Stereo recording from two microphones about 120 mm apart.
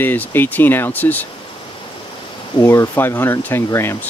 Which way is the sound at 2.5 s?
20° left (ahead or behind).